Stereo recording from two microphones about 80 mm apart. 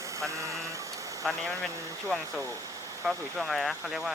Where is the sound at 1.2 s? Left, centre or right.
Centre.